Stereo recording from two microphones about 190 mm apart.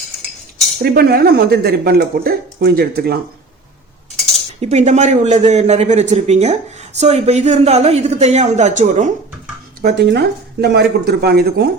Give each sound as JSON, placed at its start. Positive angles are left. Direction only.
{"t": 0.8, "sound": "speech", "side_deg": -55}
{"t": 4.6, "sound": "a man's voice", "side_deg": -35}
{"t": 9.8, "sound": "speech", "side_deg": -60}